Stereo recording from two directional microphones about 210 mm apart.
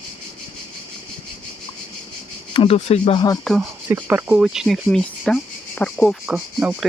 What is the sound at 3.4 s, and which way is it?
Speech, centre (ahead or behind).